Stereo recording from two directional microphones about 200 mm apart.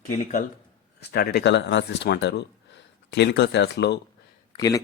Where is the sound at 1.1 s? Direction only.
50° left (ahead or behind).